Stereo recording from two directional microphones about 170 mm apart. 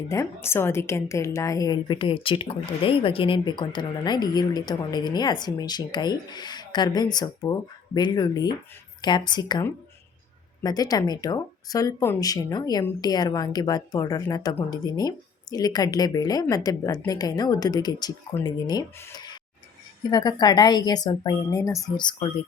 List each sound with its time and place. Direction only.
0.1 s a woman's voice: 15° left (ahead or behind)